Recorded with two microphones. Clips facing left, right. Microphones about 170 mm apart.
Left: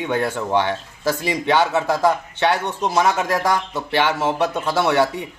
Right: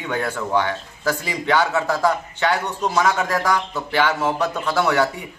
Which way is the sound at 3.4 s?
25° left (ahead or behind).